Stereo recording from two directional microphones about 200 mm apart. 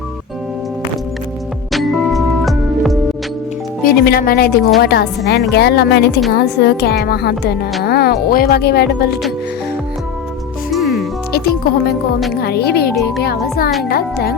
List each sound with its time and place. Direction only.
1.7 s music: centre (ahead or behind)
3.8 s speech: 50° left (ahead or behind)
10.7 s music: centre (ahead or behind)
11.3 s speech: 50° left (ahead or behind)